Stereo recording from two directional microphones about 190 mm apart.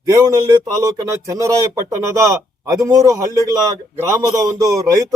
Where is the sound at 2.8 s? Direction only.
15° right (ahead or behind).